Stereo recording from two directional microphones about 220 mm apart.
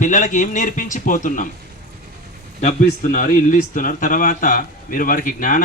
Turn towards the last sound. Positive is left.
turn(degrees=35)  # may be behind; listen again after turning